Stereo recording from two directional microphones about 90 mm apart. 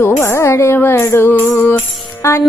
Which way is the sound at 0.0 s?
25° left (ahead or behind).